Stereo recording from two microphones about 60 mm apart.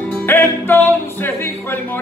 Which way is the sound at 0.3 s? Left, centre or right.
Left.